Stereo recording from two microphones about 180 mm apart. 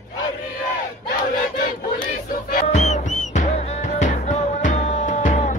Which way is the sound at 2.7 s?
40° left (ahead or behind).